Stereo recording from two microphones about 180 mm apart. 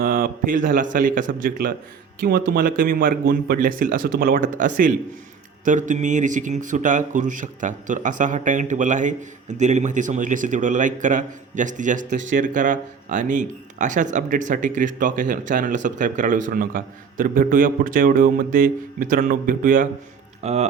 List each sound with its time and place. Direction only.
0.0 s speech: 55° right (ahead or behind)
20.4 s speech: 35° right (ahead or behind)